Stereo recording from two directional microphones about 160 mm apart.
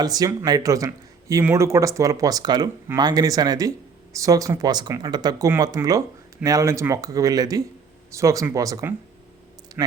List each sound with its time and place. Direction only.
0.0 s speech: 25° right (ahead or behind)